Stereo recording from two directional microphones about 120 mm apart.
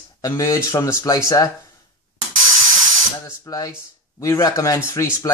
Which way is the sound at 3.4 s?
30° left (ahead or behind).